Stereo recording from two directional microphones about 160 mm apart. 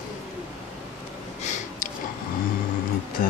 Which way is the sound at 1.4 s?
50° left (ahead or behind).